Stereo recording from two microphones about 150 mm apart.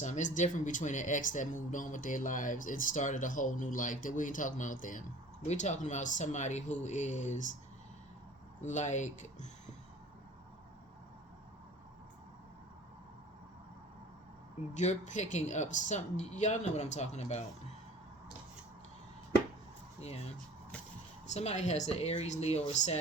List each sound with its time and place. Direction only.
0.0 s speech: 55° left (ahead or behind)
5.5 s speech: 50° left (ahead or behind)
8.6 s speech: 55° left (ahead or behind)
14.7 s speech: 50° left (ahead or behind)
20.0 s speech: 45° left (ahead or behind)
21.2 s speech: 50° left (ahead or behind)